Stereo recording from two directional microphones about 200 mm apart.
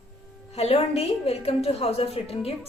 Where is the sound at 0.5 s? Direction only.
30° left (ahead or behind).